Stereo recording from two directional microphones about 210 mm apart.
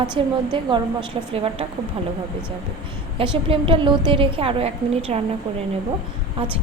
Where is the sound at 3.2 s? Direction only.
25° right (ahead or behind).